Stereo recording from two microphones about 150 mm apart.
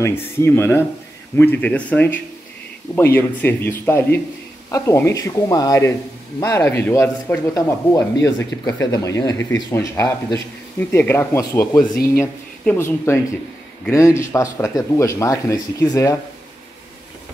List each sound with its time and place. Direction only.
0.0 s speech: 15° left (ahead or behind)
3.2 s speech: 15° left (ahead or behind)